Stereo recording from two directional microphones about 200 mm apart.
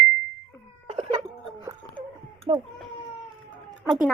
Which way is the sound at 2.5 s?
25° right (ahead or behind).